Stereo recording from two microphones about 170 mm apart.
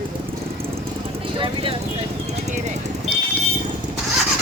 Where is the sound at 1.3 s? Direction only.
30° right (ahead or behind).